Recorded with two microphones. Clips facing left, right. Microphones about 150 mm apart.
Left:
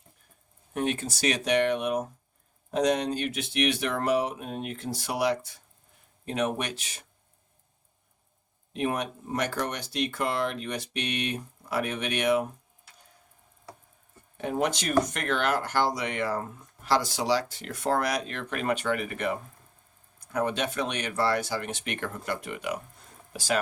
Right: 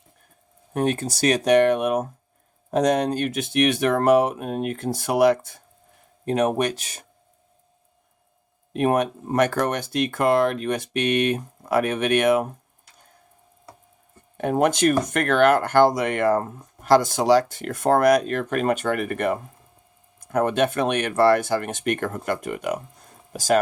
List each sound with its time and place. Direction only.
0.7 s speech: 45° right (ahead or behind)
8.7 s speech: 55° right (ahead or behind)
14.3 s speech: 55° right (ahead or behind)